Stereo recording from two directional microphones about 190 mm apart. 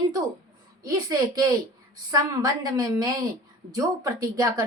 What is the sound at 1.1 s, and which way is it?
A woman's voice, 20° right (ahead or behind).